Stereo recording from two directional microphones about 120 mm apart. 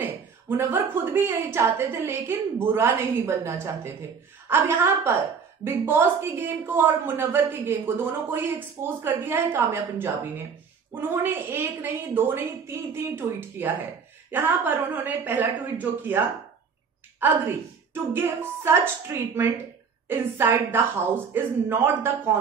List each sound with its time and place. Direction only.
0.0 s a woman's voice: 15° right (ahead or behind)